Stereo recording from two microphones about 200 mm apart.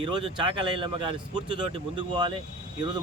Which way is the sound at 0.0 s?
25° right (ahead or behind).